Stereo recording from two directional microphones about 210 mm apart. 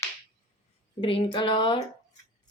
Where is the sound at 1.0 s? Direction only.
25° left (ahead or behind).